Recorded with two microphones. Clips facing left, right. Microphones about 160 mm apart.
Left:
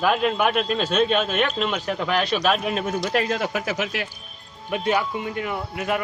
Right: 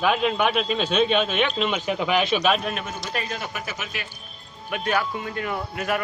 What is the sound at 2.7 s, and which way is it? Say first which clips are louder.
Speech: left 7 dB; 35° left (ahead or behind).